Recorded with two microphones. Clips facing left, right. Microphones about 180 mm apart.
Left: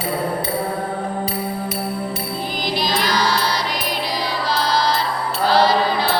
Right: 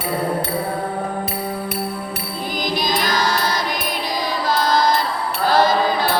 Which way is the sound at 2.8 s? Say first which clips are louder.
Left 1 dB; 45° right (ahead or behind).